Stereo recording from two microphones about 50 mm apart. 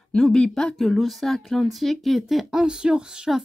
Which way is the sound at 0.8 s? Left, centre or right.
Centre.